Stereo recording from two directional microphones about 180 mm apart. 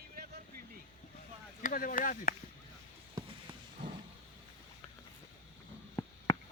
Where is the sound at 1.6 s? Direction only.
50° left (ahead or behind).